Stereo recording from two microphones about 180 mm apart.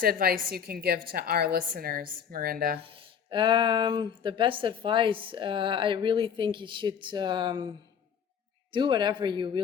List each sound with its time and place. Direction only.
0.0 s a woman's voice: 55° right (ahead or behind)
2.8 s speech: 30° right (ahead or behind)
8.7 s speech: 25° right (ahead or behind)